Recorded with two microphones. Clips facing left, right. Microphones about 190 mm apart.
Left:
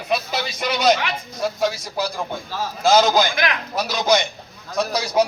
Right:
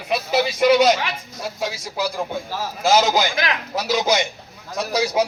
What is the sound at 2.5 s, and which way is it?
Speech, 5° right (ahead or behind).